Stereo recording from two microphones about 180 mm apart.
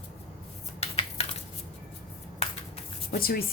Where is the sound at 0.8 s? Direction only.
35° left (ahead or behind).